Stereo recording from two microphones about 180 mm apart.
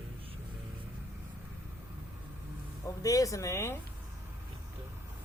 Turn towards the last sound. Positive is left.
turn(degrees=15)  # may be behind; listen again after turning